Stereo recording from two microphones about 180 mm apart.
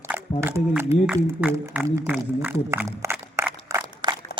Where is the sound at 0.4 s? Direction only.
10° right (ahead or behind).